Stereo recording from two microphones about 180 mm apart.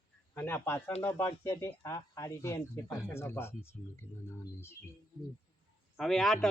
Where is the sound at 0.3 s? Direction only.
10° left (ahead or behind).